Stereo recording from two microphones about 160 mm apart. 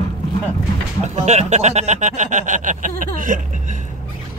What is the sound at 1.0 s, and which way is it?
Speech, 45° right (ahead or behind).